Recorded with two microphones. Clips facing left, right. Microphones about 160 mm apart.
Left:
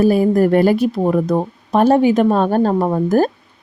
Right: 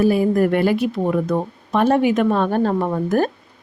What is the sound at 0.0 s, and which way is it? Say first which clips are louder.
Speech: left 3 dB; 40° left (ahead or behind).